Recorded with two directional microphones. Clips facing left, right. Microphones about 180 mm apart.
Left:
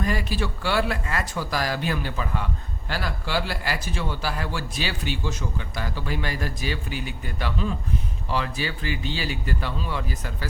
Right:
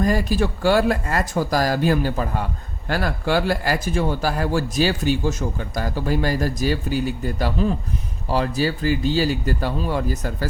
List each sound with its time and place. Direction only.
0.0 s speech: 40° right (ahead or behind)